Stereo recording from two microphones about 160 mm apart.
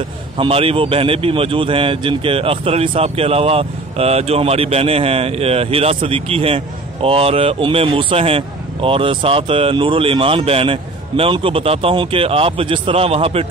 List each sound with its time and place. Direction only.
0.4 s speech: 35° right (ahead or behind)